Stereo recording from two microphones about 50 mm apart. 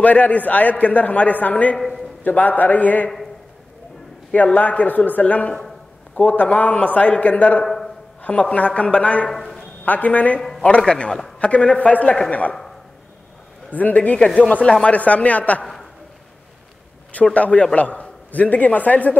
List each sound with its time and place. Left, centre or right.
0.0 s a man's voice: left
1.8 s a sound: centre
2.2 s a man's voice: left
4.6 s a man's voice: left
7.6 s a sound: centre
8.2 s a man's voice: left
9.3 s a sound: centre
9.8 s a man's voice: left
10.8 s a man's voice: centre
13.7 s a man's voice: left
15.6 s a sound: centre
17.1 s a man's voice: left